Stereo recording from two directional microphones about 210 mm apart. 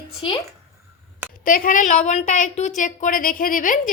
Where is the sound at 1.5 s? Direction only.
40° left (ahead or behind).